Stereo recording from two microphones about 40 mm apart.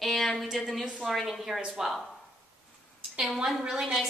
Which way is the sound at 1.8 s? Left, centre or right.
Centre.